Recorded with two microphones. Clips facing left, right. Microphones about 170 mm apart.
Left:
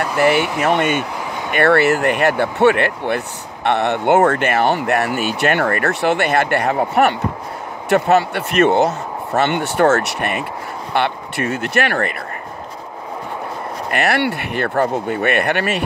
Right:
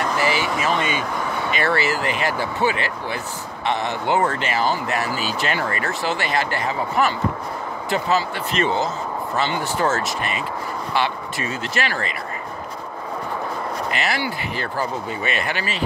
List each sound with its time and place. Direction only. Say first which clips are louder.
0.2 s speech: left 11 dB; 60° left (ahead or behind)
1.1 s vehicle: right 1 dB; 15° left (ahead or behind)
1.5 s speech: left 9 dB; 60° left (ahead or behind)
13.8 s speech: left 9 dB; 60° left (ahead or behind)